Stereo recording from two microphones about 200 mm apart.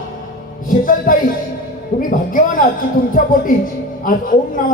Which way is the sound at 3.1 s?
45° left (ahead or behind).